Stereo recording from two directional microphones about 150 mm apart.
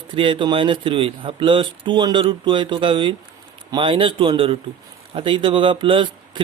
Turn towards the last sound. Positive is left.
turn(degrees=-35)  # may be behind; listen again after turning